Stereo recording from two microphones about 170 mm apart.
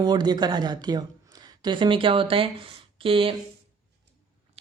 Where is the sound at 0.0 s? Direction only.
25° right (ahead or behind).